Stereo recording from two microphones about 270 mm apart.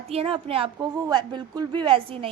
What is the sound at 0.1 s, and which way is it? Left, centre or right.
A woman's voice, right.